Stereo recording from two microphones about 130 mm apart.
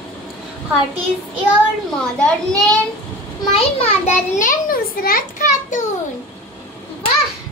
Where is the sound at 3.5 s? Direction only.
50° left (ahead or behind); by 5.9 s 80° left.